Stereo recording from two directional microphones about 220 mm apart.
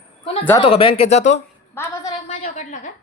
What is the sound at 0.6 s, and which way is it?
Speech, 25° left (ahead or behind).